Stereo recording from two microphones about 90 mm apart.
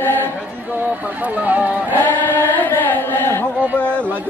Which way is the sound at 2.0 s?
20° left (ahead or behind).